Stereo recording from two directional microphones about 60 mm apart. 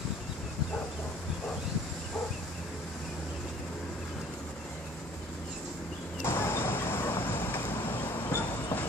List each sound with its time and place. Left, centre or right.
6.2 s vehicle: left